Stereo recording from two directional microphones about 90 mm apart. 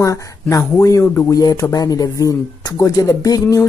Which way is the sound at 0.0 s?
40° left (ahead or behind).